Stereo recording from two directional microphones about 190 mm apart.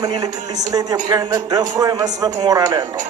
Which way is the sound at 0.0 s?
20° right (ahead or behind).